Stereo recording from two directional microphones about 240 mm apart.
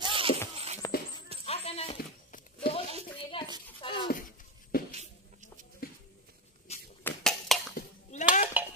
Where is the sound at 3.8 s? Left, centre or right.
Left.